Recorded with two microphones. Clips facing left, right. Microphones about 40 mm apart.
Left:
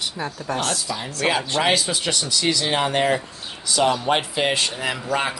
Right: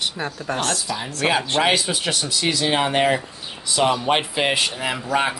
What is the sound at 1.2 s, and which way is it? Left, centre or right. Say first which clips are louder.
Speech: right 1 dB; centre.